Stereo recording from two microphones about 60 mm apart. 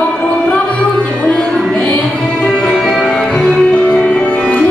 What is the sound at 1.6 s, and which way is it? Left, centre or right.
Music, centre.